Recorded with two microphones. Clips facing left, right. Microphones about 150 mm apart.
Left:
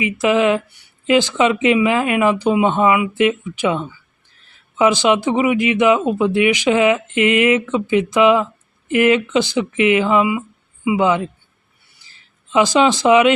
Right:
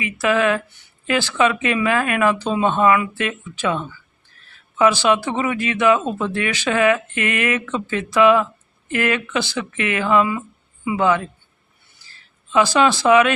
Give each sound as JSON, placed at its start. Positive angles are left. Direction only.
{"t": 0.0, "sound": "speech", "side_deg": 20}